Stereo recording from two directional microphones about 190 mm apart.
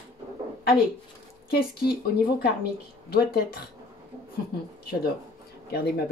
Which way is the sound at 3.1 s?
55° left (ahead or behind).